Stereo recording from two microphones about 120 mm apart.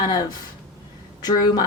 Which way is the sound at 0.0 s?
35° left (ahead or behind).